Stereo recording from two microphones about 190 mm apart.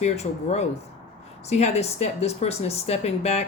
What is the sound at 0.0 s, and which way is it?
Speech, 35° left (ahead or behind).